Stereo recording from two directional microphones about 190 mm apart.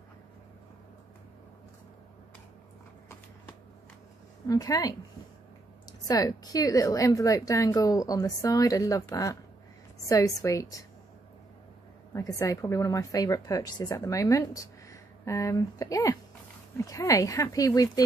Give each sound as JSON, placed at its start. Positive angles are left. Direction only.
{"t": 4.5, "sound": "a woman's voice", "side_deg": 20}
{"t": 12.1, "sound": "a woman's voice", "side_deg": 20}